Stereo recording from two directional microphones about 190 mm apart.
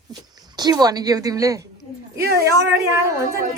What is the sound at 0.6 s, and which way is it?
A woman's voice, 20° right (ahead or behind).